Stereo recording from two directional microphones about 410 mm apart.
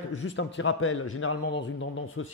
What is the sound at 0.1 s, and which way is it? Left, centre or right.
A man's voice, left.